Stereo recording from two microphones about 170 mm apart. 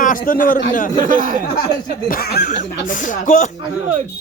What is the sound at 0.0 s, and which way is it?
A man's voice, 55° left (ahead or behind).